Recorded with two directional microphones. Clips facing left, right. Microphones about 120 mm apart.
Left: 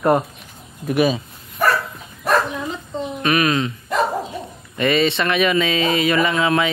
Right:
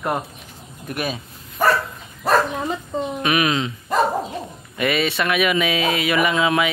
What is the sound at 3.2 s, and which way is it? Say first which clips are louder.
Speech: left 3 dB; 15° right (ahead or behind).